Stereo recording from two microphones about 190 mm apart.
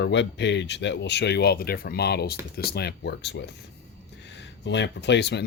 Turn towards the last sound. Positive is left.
turn(degrees=65)  # may be behind; listen again after turning